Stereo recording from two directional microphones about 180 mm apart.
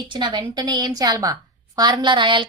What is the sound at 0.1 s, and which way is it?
A woman's voice, 25° right (ahead or behind).